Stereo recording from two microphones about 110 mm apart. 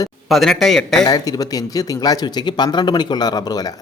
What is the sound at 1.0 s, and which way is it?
Speech, 35° left (ahead or behind).